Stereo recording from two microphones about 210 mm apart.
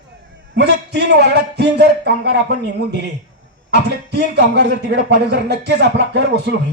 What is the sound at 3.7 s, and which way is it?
Speech, 55° right (ahead or behind).